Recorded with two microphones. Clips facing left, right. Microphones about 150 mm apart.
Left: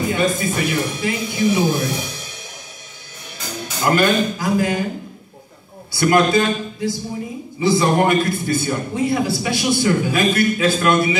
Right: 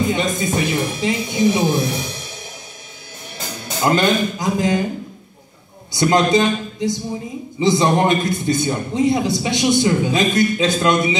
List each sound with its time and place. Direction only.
0.1 s a man's voice: 20° right (ahead or behind)
3.8 s a man's voice: 20° right (ahead or behind)
5.9 s a man's voice: 20° right (ahead or behind)